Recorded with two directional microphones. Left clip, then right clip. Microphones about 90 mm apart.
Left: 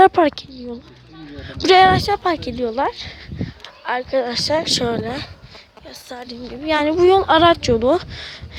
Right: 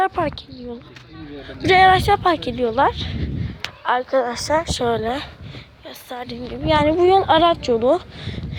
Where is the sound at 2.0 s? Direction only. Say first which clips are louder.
Right 2 dB; 10° left (ahead or behind).